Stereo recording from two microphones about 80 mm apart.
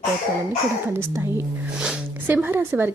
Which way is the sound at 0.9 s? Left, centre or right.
Right.